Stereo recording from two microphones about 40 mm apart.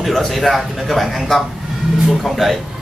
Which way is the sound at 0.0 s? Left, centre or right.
Centre.